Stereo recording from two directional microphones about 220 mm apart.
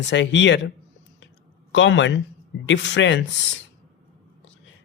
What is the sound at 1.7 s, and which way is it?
Speech, 55° left (ahead or behind).